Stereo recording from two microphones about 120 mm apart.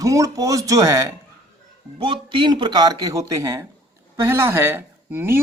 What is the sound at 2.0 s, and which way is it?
Speech, 45° right (ahead or behind).